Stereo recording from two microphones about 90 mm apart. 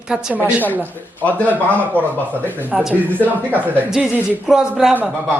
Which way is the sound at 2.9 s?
20° right (ahead or behind).